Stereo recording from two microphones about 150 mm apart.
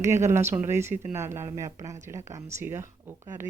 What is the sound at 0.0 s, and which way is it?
Speech, 20° right (ahead or behind).